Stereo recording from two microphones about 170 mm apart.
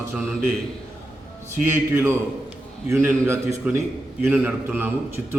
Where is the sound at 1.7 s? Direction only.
15° right (ahead or behind).